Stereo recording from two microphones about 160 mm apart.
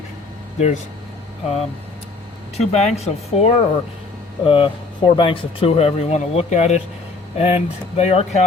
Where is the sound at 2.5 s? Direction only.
40° left (ahead or behind).